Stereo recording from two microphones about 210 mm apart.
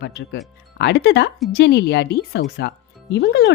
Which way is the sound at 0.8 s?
50° left (ahead or behind).